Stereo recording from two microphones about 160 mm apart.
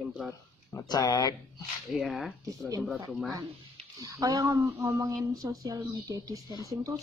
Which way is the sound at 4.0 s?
20° right (ahead or behind).